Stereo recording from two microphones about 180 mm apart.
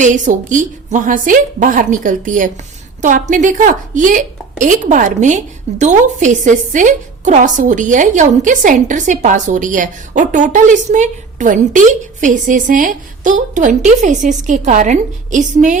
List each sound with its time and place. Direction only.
0.0 s a woman's voice: 45° right (ahead or behind)